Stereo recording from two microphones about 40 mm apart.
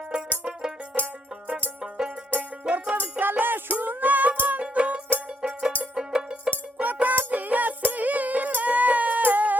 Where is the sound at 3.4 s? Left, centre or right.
Right.